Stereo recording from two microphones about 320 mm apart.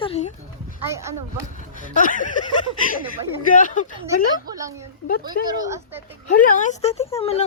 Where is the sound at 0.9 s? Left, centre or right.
Centre.